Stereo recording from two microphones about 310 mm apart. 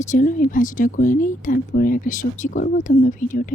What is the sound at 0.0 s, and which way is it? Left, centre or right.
Speech, left.